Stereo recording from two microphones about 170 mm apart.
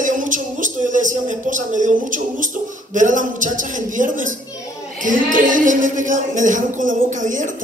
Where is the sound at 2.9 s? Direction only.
50° right (ahead or behind).